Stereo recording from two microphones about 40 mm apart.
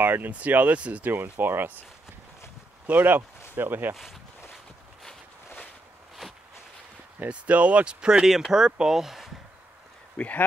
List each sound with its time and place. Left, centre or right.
0.0 s speech: right
0.3 s speech: right
1.0 s speech: right
2.9 s speech: right
3.9 s speech: centre
7.2 s speech: right
8.3 s speech: centre
10.1 s speech: left